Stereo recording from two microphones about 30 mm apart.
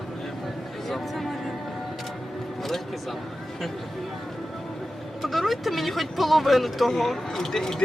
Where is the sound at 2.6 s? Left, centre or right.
Centre.